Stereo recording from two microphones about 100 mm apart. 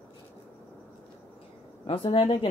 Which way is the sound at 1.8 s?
65° left (ahead or behind).